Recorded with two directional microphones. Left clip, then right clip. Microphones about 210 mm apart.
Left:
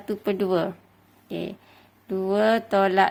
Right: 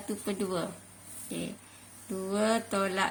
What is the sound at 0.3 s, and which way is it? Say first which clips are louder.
Speech: left 10 dB; 50° left (ahead or behind).